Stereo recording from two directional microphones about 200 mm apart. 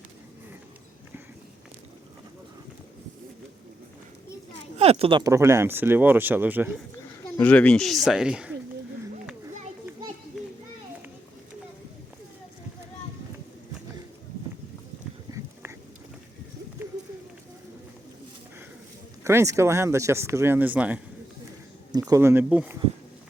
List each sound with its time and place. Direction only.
4.8 s speech: 30° right (ahead or behind); by 6.8 s 10° right (ahead or behind)
7.3 s speech: 5° left (ahead or behind)
10.3 s children playing: centre (ahead or behind)
15.3 s a sound: 20° right (ahead or behind)
19.2 s speech: 15° right (ahead or behind)